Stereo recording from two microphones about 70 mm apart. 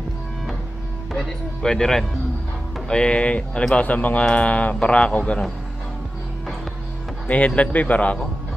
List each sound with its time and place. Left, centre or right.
1.1 s a man's voice: centre
7.2 s a man's voice: centre